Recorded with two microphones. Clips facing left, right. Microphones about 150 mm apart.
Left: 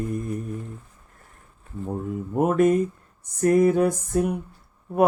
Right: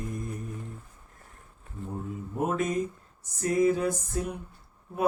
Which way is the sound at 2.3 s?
60° left (ahead or behind).